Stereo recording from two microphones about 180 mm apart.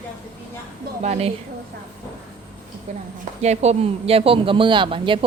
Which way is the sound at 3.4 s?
35° right (ahead or behind).